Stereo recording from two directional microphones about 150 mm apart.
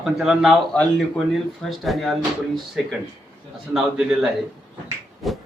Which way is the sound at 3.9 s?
5° right (ahead or behind).